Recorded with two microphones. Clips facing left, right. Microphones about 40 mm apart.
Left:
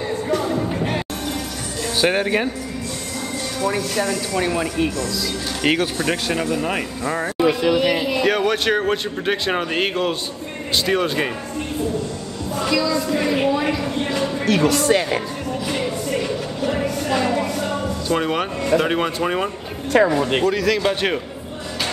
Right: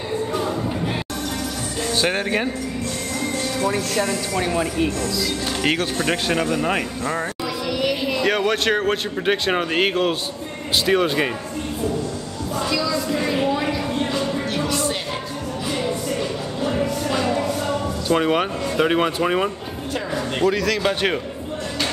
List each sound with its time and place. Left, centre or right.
2.0 s speech: centre
3.6 s a man's voice: centre
4.0 s speech: centre
4.4 s a man's voice: centre
5.9 s speech: centre
7.3 s speech: left
7.7 s a man's voice: left
8.1 s a man's voice: centre
12.9 s a woman's voice: left
14.4 s music: left
17.2 s a sound: left
18.1 s a man's voice: centre